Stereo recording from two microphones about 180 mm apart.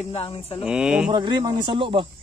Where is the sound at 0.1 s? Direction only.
30° left (ahead or behind).